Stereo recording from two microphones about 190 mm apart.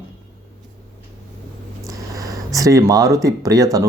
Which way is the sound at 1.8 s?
15° right (ahead or behind).